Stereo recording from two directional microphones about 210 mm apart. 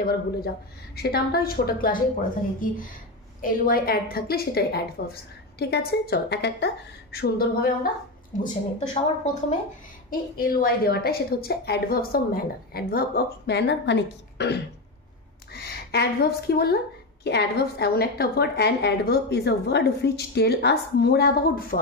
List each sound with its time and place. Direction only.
0.0 s a woman's voice: 45° left (ahead or behind)
3.3 s a woman's voice: 40° left (ahead or behind)
8.4 s a woman's voice: 35° left (ahead or behind)
10.0 s a woman's voice: 45° left (ahead or behind)